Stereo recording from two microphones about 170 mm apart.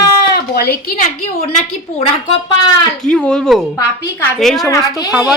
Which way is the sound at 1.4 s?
35° left (ahead or behind).